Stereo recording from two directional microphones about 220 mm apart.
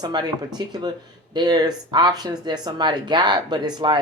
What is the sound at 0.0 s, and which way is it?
Speech, 20° right (ahead or behind).